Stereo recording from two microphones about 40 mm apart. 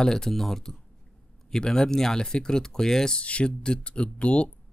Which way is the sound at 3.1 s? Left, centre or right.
Left.